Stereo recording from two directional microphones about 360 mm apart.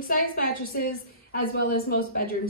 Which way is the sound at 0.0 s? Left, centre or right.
Left.